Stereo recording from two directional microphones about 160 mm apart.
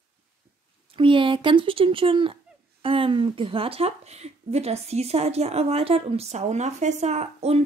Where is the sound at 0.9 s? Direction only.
30° right (ahead or behind).